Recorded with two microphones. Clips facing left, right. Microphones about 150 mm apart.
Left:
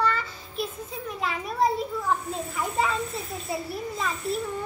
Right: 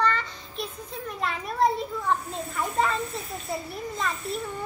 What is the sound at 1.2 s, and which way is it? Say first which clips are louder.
A child's voice: right 1 dB; centre (ahead or behind).